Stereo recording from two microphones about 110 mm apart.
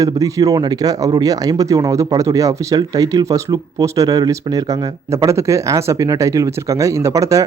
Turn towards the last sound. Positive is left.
turn(degrees=-25)  # may be behind; listen again after turning